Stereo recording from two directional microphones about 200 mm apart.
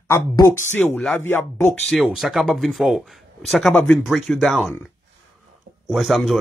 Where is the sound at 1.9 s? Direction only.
Centre (ahead or behind).